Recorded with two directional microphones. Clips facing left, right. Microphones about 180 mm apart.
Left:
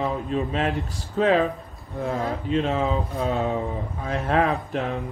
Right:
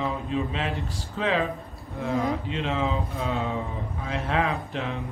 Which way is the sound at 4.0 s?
45° left (ahead or behind).